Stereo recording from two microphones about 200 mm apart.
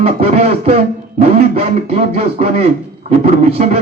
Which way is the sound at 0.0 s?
30° right (ahead or behind).